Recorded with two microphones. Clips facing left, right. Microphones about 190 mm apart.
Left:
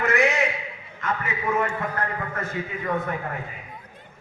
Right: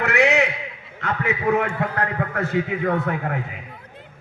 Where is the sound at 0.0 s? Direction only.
70° right (ahead or behind).